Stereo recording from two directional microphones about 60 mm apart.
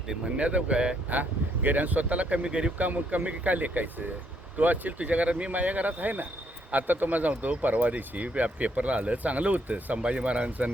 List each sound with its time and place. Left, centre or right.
0.1 s speech: centre
1.1 s speech: right